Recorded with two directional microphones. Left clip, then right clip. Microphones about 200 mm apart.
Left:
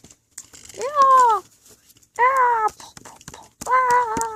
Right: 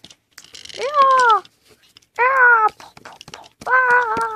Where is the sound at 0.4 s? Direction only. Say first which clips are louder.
Right 8 dB; 45° right (ahead or behind).